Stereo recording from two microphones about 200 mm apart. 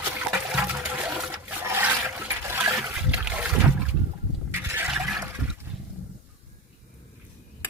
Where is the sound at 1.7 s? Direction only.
10° right (ahead or behind).